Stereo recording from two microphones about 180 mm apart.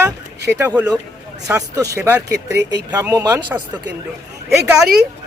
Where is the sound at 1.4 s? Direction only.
20° right (ahead or behind).